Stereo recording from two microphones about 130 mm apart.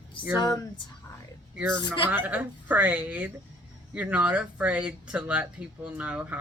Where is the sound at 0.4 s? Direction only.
25° left (ahead or behind).